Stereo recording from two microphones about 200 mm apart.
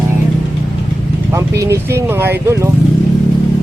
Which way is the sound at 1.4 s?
15° right (ahead or behind).